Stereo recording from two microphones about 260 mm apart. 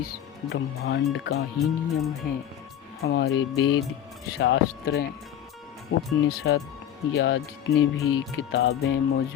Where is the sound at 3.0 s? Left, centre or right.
Left.